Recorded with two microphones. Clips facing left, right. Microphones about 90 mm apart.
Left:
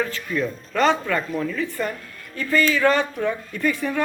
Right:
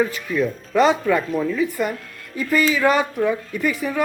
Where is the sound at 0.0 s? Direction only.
10° right (ahead or behind).